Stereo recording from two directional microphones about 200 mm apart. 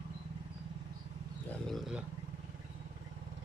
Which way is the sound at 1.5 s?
Centre (ahead or behind).